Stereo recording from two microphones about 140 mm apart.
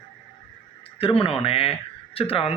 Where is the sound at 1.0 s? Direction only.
40° left (ahead or behind).